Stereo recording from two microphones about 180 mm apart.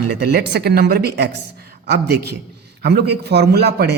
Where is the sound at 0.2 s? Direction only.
65° right (ahead or behind).